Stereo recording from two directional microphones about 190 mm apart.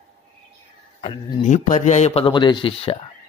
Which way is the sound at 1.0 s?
30° left (ahead or behind).